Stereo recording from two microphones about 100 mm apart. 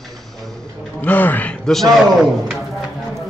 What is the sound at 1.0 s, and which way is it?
Speech, 20° left (ahead or behind).